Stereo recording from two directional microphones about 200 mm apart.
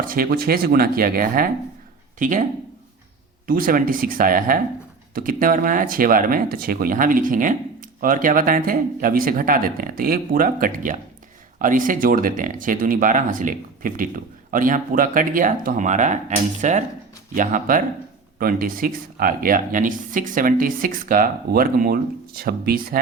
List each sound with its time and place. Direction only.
0.0 s speech: 45° right (ahead or behind)